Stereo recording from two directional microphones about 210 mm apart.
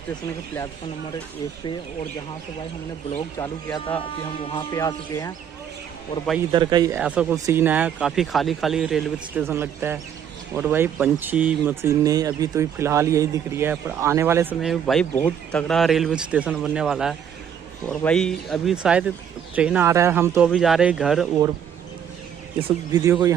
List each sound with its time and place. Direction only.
3.2 s speech: 20° left (ahead or behind)
6.5 s speech: 20° right (ahead or behind)
7.0 s speech: 5° right (ahead or behind)
22.7 s speech: 15° right (ahead or behind)